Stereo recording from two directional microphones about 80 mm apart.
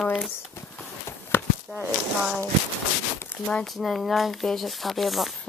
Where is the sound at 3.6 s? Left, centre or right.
Centre.